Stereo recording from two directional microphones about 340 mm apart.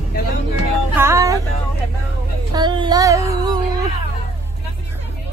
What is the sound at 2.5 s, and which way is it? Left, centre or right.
Child singing, centre.